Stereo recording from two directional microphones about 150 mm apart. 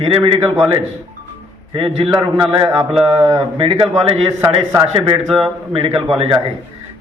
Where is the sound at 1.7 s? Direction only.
35° right (ahead or behind).